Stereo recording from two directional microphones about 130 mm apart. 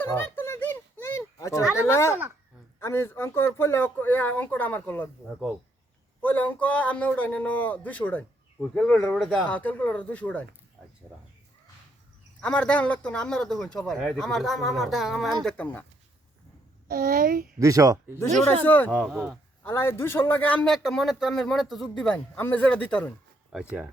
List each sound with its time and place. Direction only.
0.0 s a sound: 20° left (ahead or behind)
1.7 s a man's voice: 20° left (ahead or behind)
6.2 s a man's voice: 15° left (ahead or behind)
9.5 s a man's voice: 10° left (ahead or behind)
12.4 s a man's voice: 10° left (ahead or behind)
15.4 s a man's voice: 10° left (ahead or behind)
16.9 s a child's voice: 90° right
17.6 s speech: 25° right (ahead or behind)
18.6 s a man's voice: 15° left (ahead or behind)
18.9 s speech: centre (ahead or behind)
19.6 s a man's voice: 20° left (ahead or behind)
23.5 s speech: 5° right (ahead or behind)